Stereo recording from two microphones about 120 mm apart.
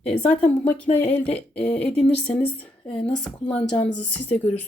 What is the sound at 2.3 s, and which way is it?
Speech, 10° left (ahead or behind).